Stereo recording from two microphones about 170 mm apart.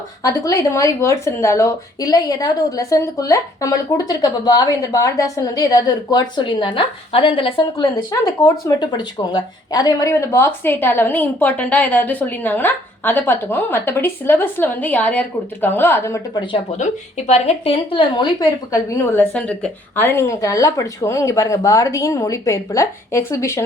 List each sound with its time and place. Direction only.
0.2 s speech: 20° left (ahead or behind)
16.7 s a woman's voice: 45° left (ahead or behind); by 23.6 s 15° left (ahead or behind)